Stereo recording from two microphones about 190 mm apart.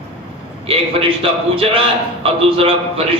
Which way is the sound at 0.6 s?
30° right (ahead or behind).